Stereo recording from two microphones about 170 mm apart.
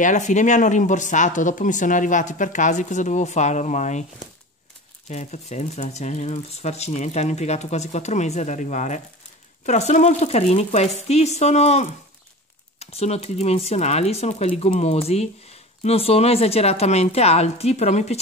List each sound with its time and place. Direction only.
0.0 s speech: 45° left (ahead or behind)
5.1 s speech: 45° left (ahead or behind)